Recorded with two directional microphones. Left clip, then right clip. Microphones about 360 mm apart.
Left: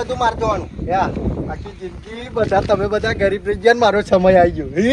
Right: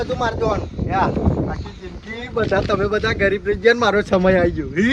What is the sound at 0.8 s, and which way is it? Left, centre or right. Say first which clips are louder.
Speech: left 1 dB; centre.